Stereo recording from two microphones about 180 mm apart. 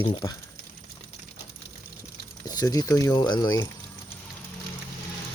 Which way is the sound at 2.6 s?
20° left (ahead or behind).